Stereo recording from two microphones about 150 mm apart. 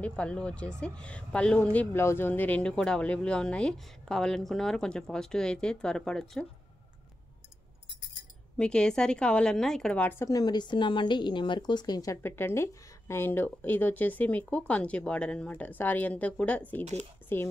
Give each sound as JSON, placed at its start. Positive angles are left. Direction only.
{"t": 0.0, "sound": "speech", "side_deg": 5}
{"t": 8.5, "sound": "a woman's voice", "side_deg": 5}